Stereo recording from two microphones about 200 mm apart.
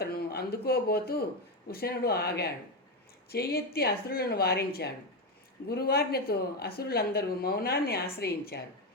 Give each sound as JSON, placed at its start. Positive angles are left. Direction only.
{"t": 0.0, "sound": "speech", "side_deg": 50}